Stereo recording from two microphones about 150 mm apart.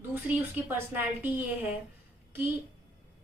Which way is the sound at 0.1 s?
15° right (ahead or behind).